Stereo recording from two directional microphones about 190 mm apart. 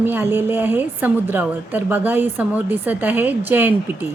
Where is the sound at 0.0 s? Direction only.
10° right (ahead or behind).